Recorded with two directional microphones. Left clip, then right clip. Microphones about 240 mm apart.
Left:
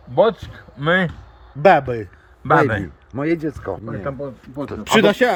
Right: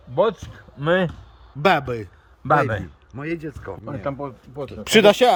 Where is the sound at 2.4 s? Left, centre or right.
Right.